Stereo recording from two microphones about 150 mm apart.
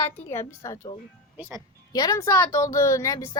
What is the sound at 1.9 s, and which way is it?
A woman's voice, 25° left (ahead or behind).